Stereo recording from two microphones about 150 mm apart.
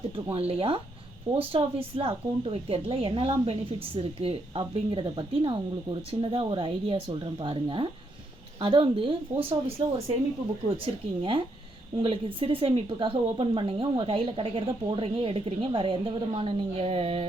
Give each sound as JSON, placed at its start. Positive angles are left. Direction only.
{"t": 0.3, "sound": "a woman's voice", "side_deg": -40}
{"t": 11.2, "sound": "a woman's voice", "side_deg": -35}